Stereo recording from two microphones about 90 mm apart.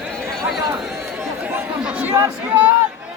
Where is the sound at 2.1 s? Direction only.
35° right (ahead or behind).